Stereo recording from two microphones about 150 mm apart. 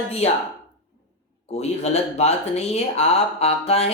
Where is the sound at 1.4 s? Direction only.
45° left (ahead or behind).